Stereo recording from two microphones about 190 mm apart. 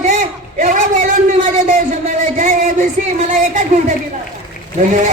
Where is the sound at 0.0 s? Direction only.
45° right (ahead or behind).